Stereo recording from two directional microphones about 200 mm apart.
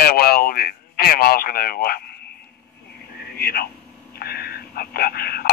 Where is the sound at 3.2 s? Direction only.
50° left (ahead or behind).